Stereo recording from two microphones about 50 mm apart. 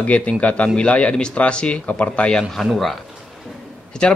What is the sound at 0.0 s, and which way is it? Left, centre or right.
A man's voice, left.